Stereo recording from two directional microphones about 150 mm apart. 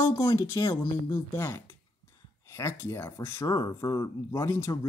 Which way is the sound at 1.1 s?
20° left (ahead or behind).